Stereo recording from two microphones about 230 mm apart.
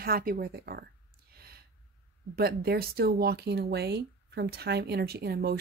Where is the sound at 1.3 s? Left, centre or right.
Right.